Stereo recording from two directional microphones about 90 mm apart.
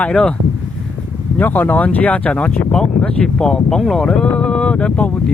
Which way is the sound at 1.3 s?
20° left (ahead or behind).